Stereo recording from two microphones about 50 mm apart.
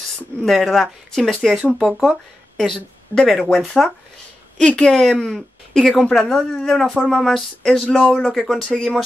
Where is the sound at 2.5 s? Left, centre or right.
Centre.